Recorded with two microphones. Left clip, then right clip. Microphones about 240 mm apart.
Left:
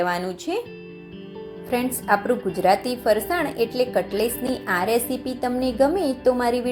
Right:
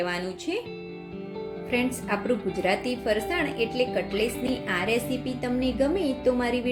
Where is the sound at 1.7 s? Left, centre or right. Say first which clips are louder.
Left 6 dB; centre.